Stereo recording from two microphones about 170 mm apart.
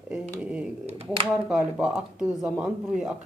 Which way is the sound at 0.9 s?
40° right (ahead or behind).